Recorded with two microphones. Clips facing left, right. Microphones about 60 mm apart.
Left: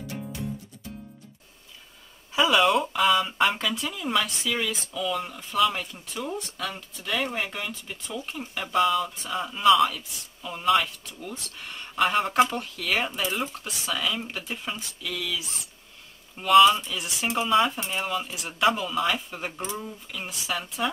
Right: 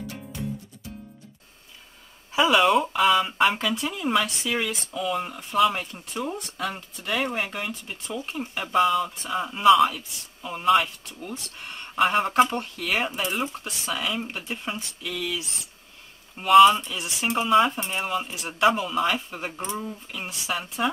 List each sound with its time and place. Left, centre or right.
2.3 s speech: centre
3.5 s speech: centre
8.7 s speech: centre
9.8 s speech: centre
10.6 s speech: centre
11.1 s speech: right
12.0 s speech: centre
12.7 s speech: centre
13.9 s speech: centre
15.0 s speech: right
16.4 s speech: centre